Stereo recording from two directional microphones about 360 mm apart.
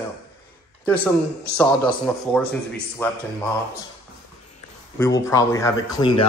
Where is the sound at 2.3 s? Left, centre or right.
Centre.